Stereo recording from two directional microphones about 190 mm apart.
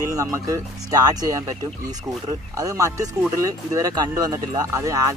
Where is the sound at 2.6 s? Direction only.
15° right (ahead or behind).